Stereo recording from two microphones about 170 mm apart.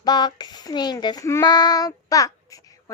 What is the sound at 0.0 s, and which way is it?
Child singing, 25° left (ahead or behind).